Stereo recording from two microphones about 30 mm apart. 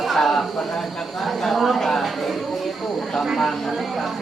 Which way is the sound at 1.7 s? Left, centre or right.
Centre.